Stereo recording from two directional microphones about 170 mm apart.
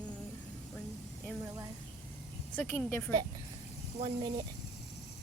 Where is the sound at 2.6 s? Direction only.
15° left (ahead or behind).